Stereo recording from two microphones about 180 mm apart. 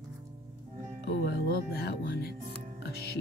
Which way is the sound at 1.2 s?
65° left (ahead or behind).